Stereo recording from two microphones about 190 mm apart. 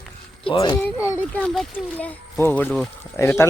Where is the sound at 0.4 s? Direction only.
20° left (ahead or behind).